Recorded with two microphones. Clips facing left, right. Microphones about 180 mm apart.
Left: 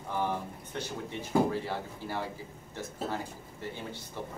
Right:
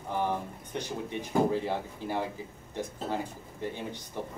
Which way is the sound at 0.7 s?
15° right (ahead or behind).